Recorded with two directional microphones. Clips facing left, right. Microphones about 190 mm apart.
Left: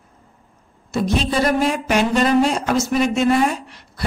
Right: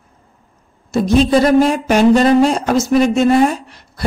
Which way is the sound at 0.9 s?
40° right (ahead or behind).